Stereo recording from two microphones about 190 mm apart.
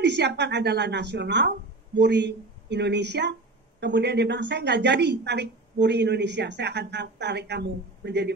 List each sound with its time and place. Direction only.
0.0 s a woman's voice: 65° right (ahead or behind)